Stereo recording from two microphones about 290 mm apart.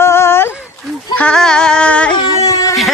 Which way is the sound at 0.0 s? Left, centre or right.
Centre.